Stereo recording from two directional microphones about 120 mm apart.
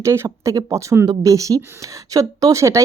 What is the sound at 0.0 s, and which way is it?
Speech, 25° right (ahead or behind).